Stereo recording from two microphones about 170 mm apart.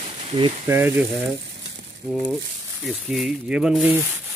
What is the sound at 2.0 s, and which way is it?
Speech, centre (ahead or behind).